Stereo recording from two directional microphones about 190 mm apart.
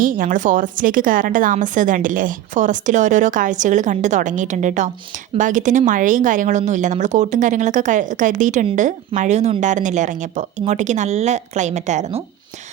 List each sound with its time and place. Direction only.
0.0 s a woman's voice: 45° right (ahead or behind)